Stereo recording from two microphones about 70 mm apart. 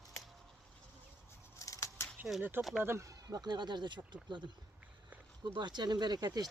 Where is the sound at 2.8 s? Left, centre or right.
Right.